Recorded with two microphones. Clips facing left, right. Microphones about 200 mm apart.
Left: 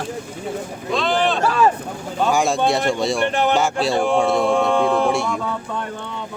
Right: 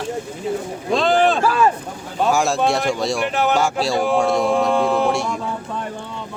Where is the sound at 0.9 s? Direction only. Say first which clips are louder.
Right 3 dB; 45° right (ahead or behind).